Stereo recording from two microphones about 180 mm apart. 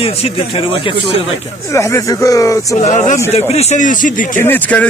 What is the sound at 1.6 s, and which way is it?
A man's voice, 15° left (ahead or behind).